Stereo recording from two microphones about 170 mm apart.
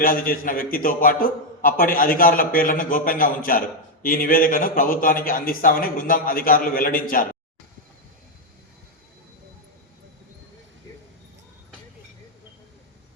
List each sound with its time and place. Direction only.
0.0 s a man's voice: 55° left (ahead or behind)